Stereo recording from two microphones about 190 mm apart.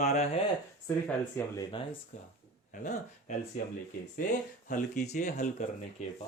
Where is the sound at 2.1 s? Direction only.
40° left (ahead or behind).